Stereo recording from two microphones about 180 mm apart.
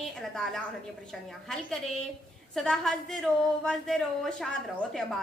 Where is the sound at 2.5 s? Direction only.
Centre (ahead or behind).